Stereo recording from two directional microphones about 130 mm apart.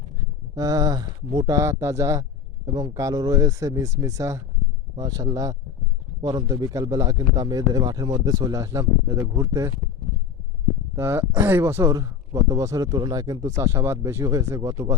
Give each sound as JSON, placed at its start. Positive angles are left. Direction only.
{"t": 0.5, "sound": "speech", "side_deg": -30}
{"t": 10.9, "sound": "speech", "side_deg": -20}